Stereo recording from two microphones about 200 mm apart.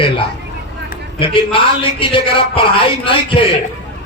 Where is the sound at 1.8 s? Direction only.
25° left (ahead or behind).